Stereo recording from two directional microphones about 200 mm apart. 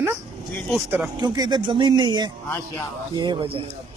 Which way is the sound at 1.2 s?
20° right (ahead or behind).